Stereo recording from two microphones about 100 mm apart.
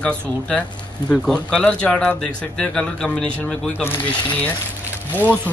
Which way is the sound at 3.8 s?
20° left (ahead or behind).